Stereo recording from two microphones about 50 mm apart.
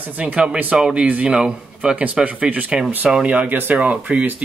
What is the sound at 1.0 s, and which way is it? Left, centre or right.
Speech, right.